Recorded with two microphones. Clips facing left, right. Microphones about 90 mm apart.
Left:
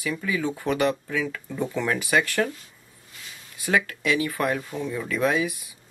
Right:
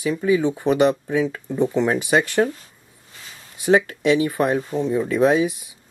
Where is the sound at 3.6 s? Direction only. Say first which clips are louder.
Right 7 dB; 25° right (ahead or behind).